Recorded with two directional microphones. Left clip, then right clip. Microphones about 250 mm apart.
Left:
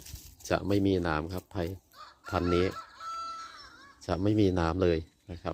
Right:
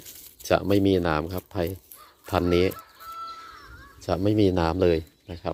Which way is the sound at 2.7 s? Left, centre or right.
Left.